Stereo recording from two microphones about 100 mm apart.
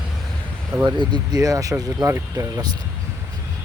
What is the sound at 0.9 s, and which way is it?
Speech, 45° right (ahead or behind).